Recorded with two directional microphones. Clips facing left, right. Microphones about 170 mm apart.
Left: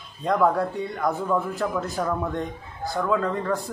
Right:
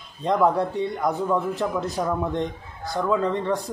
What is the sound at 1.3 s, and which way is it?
Speech, 5° right (ahead or behind).